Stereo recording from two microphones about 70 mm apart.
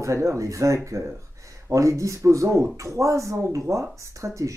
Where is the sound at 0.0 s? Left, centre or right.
Right.